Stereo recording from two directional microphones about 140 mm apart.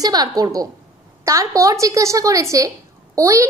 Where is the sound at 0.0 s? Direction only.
30° right (ahead or behind).